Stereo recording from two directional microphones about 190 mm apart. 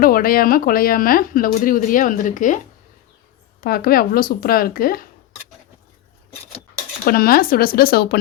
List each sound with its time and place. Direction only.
0.0 s speech: 50° left (ahead or behind)
3.6 s speech: 50° left (ahead or behind)
7.0 s speech: 50° left (ahead or behind)